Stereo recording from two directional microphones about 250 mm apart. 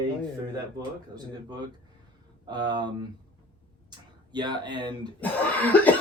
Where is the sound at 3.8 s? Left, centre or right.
Centre.